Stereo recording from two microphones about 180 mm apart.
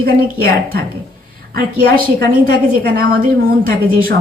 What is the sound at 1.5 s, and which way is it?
A woman's voice, 60° right (ahead or behind).